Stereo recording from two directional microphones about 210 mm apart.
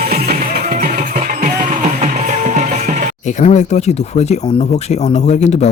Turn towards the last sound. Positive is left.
turn(degrees=35)  # may be behind; listen again after turning